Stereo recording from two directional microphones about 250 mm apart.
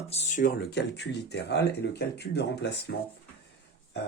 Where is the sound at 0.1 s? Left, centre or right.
Left.